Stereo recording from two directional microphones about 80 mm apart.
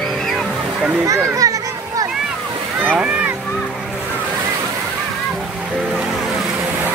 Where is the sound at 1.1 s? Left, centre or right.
Right.